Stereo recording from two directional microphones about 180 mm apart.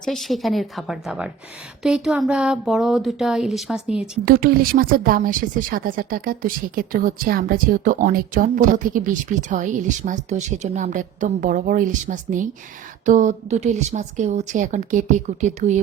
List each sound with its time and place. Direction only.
0.0 s speech: centre (ahead or behind)
4.3 s a woman's voice: 55° right (ahead or behind)